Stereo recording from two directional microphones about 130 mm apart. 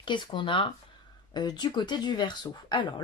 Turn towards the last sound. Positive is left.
turn(degrees=35)  # may be behind; listen again after turning